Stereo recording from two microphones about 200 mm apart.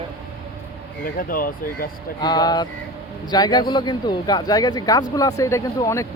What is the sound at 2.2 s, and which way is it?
Speech, 20° left (ahead or behind).